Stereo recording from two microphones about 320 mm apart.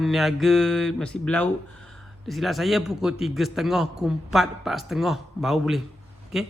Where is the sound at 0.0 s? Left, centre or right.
Centre.